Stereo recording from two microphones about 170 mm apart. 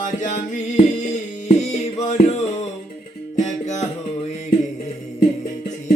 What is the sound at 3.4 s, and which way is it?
Music, 45° left (ahead or behind).